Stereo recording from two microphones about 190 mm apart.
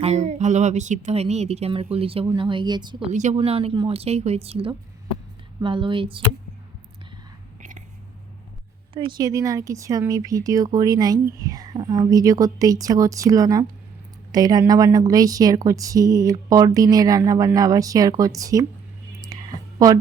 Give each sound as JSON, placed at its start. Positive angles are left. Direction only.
{"t": 0.0, "sound": "speech", "side_deg": -35}
{"t": 3.1, "sound": "speech", "side_deg": -40}
{"t": 8.9, "sound": "speech", "side_deg": -25}
{"t": 19.3, "sound": "a sound", "side_deg": -20}